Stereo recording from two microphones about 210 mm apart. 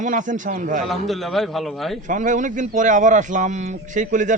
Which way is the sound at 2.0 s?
35° right (ahead or behind).